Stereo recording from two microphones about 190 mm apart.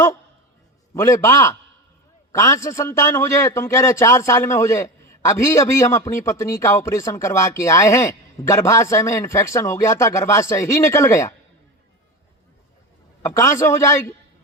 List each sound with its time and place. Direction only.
0.9 s a man's voice: 15° left (ahead or behind)
13.2 s a man's voice: 15° left (ahead or behind)